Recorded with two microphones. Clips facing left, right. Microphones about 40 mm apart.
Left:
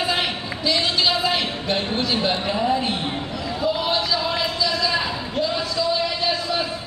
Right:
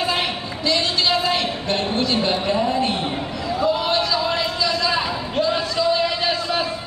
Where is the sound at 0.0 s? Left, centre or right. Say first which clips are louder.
Right 1 dB; centre.